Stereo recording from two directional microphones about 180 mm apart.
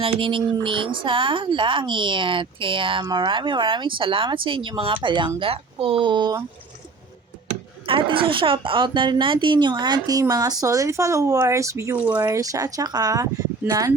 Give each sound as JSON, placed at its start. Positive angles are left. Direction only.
{"t": 0.0, "sound": "speech", "side_deg": -30}
{"t": 7.9, "sound": "speech", "side_deg": -30}